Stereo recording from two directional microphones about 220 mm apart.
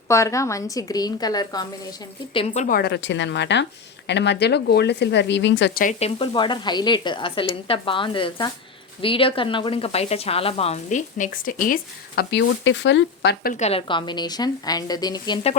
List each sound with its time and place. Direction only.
0.1 s a woman's voice: 15° left (ahead or behind)
2.6 s speech: 45° left (ahead or behind)
5.8 s speech: 30° left (ahead or behind); by 13.5 s 55° left (ahead or behind)
13.5 s speech: 30° left (ahead or behind)